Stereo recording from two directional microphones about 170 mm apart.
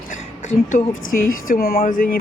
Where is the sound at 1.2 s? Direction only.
60° left (ahead or behind).